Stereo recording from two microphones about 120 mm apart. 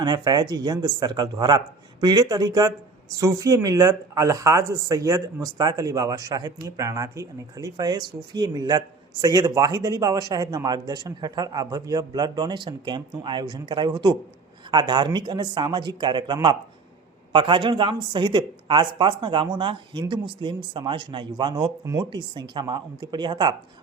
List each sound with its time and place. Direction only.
0.0 s speech: 35° right (ahead or behind)